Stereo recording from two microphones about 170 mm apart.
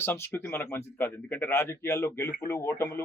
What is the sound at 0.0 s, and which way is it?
A man's voice, 15° left (ahead or behind).